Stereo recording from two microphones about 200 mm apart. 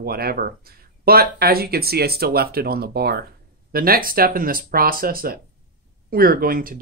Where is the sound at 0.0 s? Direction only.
50° right (ahead or behind).